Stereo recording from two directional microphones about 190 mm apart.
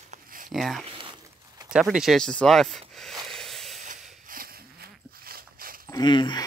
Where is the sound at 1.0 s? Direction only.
25° right (ahead or behind).